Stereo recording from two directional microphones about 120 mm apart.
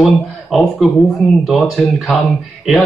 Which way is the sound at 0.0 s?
Centre (ahead or behind).